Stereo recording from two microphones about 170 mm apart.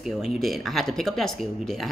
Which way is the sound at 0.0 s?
Centre (ahead or behind).